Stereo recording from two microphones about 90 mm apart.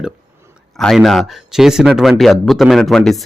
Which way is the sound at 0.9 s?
Centre (ahead or behind).